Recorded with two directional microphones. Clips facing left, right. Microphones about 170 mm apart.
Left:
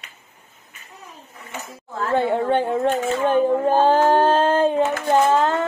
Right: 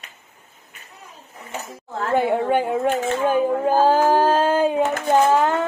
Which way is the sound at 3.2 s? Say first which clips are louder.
Left 2 dB; 5° right (ahead or behind).